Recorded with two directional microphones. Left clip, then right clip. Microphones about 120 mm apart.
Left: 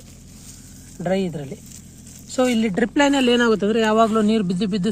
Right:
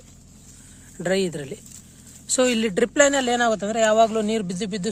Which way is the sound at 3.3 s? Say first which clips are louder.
Left 3 dB; 15° right (ahead or behind).